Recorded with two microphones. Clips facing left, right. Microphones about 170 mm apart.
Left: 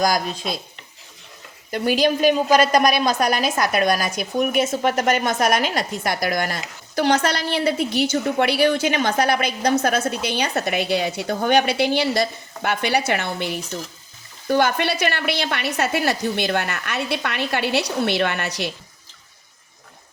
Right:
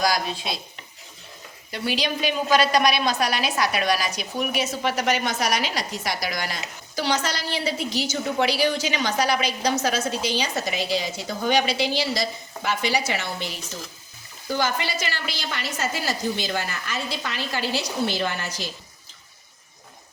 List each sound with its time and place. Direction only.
0.3 s a woman's voice: 45° left (ahead or behind)
1.7 s a woman's voice: 50° left (ahead or behind); by 18.7 s 65° left (ahead or behind)